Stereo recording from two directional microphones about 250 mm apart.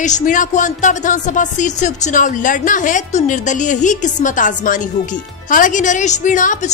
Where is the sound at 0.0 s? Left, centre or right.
Left.